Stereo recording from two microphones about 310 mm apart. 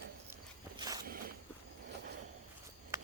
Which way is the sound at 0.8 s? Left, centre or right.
Centre.